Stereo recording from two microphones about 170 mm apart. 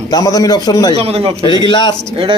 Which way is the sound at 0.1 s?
20° left (ahead or behind).